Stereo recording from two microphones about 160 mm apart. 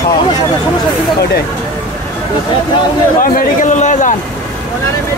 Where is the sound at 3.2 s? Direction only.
50° left (ahead or behind).